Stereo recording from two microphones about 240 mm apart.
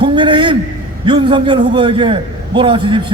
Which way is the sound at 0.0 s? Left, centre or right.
Centre.